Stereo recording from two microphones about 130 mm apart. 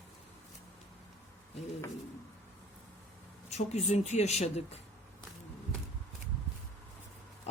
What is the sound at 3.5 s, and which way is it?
Speech, 60° left (ahead or behind).